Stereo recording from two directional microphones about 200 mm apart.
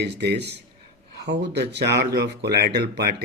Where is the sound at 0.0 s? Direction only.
55° right (ahead or behind).